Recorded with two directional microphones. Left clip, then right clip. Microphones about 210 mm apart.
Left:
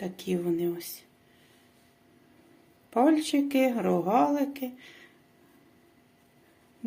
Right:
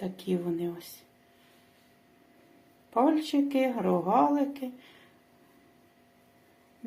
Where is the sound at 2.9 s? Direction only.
30° left (ahead or behind).